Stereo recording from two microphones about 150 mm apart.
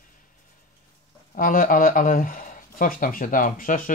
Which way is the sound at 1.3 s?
65° left (ahead or behind).